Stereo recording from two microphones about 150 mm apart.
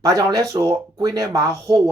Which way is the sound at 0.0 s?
25° right (ahead or behind).